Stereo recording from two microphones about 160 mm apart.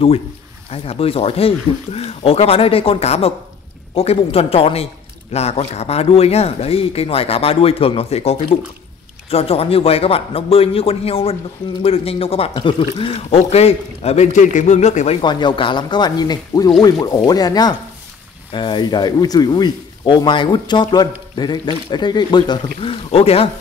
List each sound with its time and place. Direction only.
0.7 s speech: 35° left (ahead or behind)
15.2 s speech: 30° left (ahead or behind)